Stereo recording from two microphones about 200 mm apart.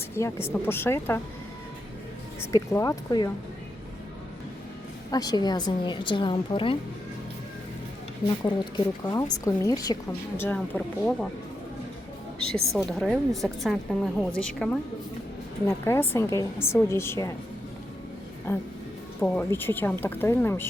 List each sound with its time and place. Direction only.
0.2 s a woman's voice: 15° left (ahead or behind)
2.5 s a woman's voice: 15° left (ahead or behind)
5.1 s speech: 20° left (ahead or behind)
8.4 s a woman's voice: 20° left (ahead or behind)
12.4 s a woman's voice: 5° left (ahead or behind)
18.5 s a woman's voice: 10° left (ahead or behind)